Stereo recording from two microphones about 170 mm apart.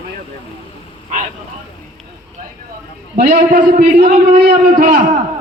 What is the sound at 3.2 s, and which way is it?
A man's voice, 45° right (ahead or behind).